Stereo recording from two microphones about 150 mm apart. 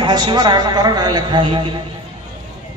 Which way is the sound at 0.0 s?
30° right (ahead or behind).